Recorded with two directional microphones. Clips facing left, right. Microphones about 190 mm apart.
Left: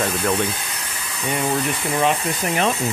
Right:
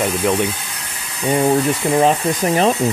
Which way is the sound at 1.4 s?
35° right (ahead or behind).